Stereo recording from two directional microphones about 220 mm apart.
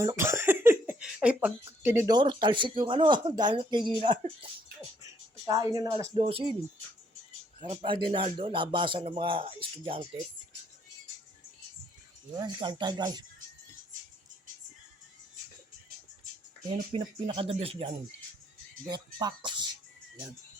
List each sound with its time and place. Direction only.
0.0 s speech: 15° right (ahead or behind)
5.5 s a woman's voice: 15° right (ahead or behind)
7.6 s speech: 25° right (ahead or behind)
12.3 s speech: 20° right (ahead or behind)
16.9 s speech: 25° right (ahead or behind)